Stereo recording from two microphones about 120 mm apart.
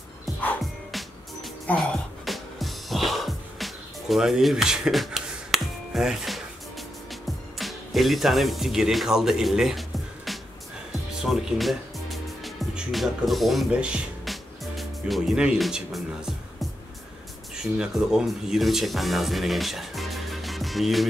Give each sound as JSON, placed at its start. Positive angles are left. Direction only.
{"t": 0.9, "sound": "music", "side_deg": 0}
{"t": 13.7, "sound": "speech", "side_deg": -10}
{"t": 17.7, "sound": "speech", "side_deg": -5}